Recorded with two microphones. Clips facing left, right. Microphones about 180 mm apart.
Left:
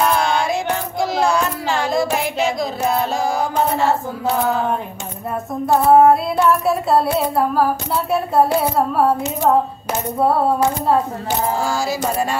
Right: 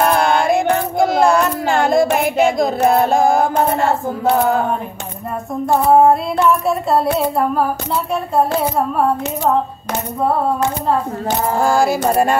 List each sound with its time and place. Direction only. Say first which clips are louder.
0.0 s music: right 3 dB; 55° right (ahead or behind)
5.9 s child singing: even; centre (ahead or behind)
11.5 s music: right 6 dB; 55° right (ahead or behind)